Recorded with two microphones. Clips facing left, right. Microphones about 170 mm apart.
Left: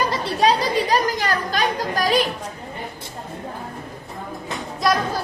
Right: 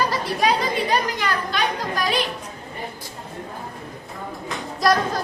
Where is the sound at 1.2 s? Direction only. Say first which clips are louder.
Left 2 dB; 40° left (ahead or behind).